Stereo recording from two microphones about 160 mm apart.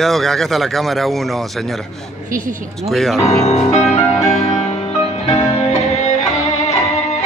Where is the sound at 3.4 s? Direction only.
45° left (ahead or behind).